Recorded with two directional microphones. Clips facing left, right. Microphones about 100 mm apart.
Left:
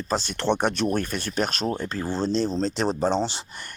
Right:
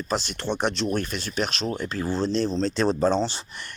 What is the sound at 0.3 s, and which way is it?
Speech, 70° left (ahead or behind).